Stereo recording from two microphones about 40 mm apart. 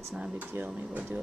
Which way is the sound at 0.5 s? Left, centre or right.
Right.